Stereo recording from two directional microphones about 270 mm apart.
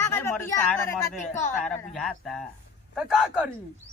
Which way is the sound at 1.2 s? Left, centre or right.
Left.